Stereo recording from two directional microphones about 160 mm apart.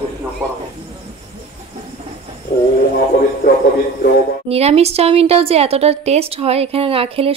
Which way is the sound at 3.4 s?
60° left (ahead or behind).